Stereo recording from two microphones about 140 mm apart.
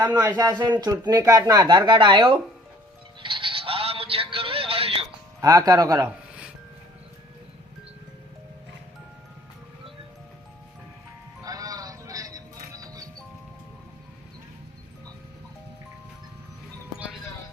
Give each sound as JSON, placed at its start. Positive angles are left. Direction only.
{"t": 0.0, "sound": "speech", "side_deg": -30}
{"t": 3.2, "sound": "music", "side_deg": -35}
{"t": 5.4, "sound": "speech", "side_deg": -25}
{"t": 6.1, "sound": "music", "side_deg": -10}
{"t": 11.4, "sound": "music", "side_deg": -25}